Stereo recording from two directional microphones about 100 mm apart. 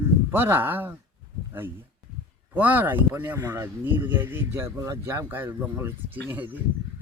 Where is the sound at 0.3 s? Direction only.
20° right (ahead or behind).